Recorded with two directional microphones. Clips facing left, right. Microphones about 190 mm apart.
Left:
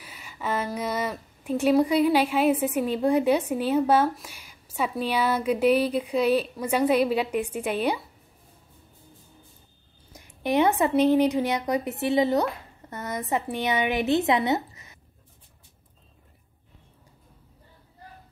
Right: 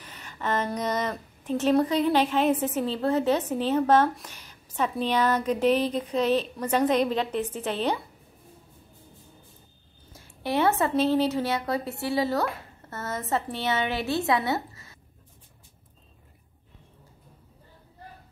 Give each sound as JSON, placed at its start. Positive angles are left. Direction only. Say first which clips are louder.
{"t": 0.0, "sound": "a woman's voice", "louder": "even", "side_deg": 10}
{"t": 10.1, "sound": "a woman's voice", "louder": "left 4 dB", "side_deg": 15}